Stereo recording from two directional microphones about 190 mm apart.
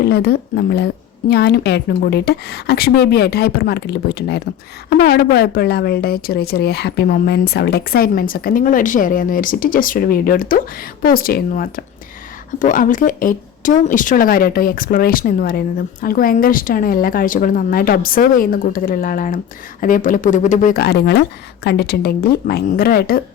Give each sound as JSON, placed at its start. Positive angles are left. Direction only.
{"t": 0.0, "sound": "a woman's voice", "side_deg": 55}